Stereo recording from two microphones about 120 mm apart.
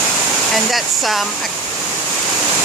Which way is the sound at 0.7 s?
Centre (ahead or behind).